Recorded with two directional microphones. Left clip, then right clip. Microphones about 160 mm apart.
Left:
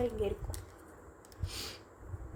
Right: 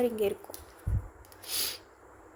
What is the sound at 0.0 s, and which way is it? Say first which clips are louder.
Speech: right 6 dB; 40° right (ahead or behind).